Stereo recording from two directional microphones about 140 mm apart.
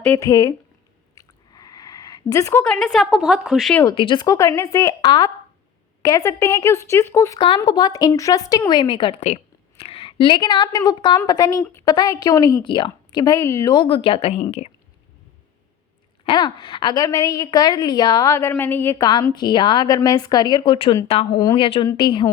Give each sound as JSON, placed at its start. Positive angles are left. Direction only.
{"t": 0.2, "sound": "a woman's voice", "side_deg": 25}
{"t": 1.1, "sound": "a sound", "side_deg": 25}
{"t": 2.6, "sound": "a woman's voice", "side_deg": 5}
{"t": 3.9, "sound": "a woman's voice", "side_deg": 35}
{"t": 7.3, "sound": "a woman's voice", "side_deg": 35}
{"t": 16.2, "sound": "a woman's voice", "side_deg": 35}
{"t": 19.3, "sound": "a woman's voice", "side_deg": 35}